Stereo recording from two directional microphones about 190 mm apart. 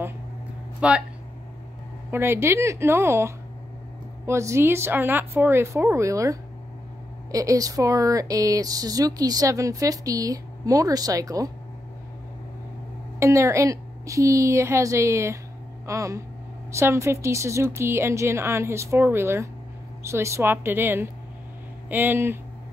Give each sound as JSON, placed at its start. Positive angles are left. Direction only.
{"t": 0.7, "sound": "speech", "side_deg": -5}
{"t": 2.0, "sound": "a woman's voice", "side_deg": -10}
{"t": 13.2, "sound": "a woman's voice", "side_deg": -15}